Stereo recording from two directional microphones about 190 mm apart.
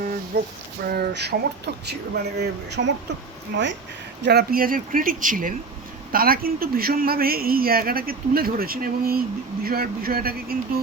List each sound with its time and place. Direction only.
0.3 s speech: 60° right (ahead or behind)
4.2 s a man's voice: 60° right (ahead or behind)